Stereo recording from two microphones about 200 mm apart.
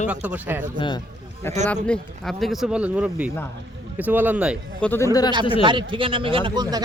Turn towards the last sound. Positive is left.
turn(degrees=-20)  # may be behind; listen again after turning